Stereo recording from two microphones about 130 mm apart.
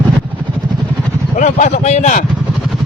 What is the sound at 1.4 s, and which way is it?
Speech, 80° left.